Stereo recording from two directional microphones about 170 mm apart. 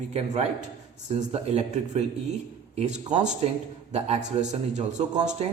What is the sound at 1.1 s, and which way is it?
Speech, 35° right (ahead or behind).